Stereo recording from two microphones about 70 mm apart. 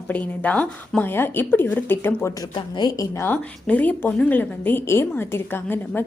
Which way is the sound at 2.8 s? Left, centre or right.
Left.